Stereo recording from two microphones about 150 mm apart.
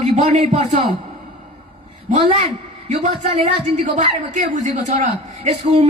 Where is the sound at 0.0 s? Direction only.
50° right (ahead or behind).